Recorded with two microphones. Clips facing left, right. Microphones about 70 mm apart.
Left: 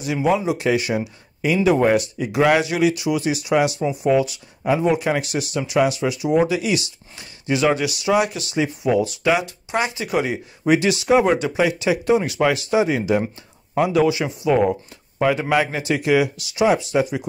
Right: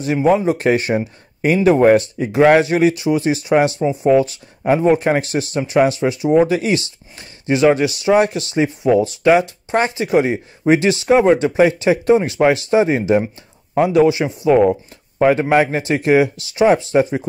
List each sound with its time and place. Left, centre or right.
0.0 s speech: right